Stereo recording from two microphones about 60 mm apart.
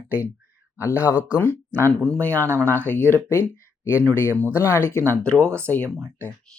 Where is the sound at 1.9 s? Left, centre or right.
Centre.